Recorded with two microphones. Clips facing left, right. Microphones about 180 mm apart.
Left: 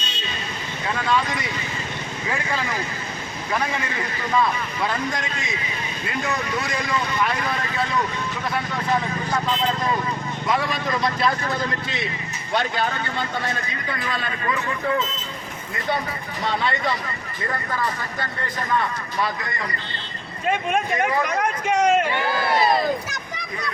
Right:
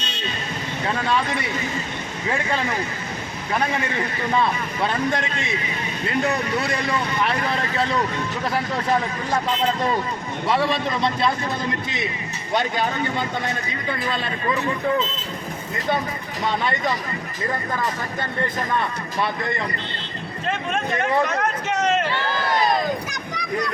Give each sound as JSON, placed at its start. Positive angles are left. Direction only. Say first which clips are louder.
{"t": 1.0, "sound": "a man's voice", "louder": "left 2 dB", "side_deg": -30}
{"t": 10.4, "sound": "a man's voice", "louder": "right 3 dB", "side_deg": -30}
{"t": 12.5, "sound": "a man's voice", "louder": "right 1 dB", "side_deg": -15}
{"t": 14.1, "sound": "a man's voice", "louder": "even", "side_deg": -25}
{"t": 20.5, "sound": "a sound", "louder": "left 3 dB", "side_deg": 15}